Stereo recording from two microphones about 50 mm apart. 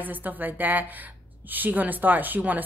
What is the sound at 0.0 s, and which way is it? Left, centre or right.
Speech, right.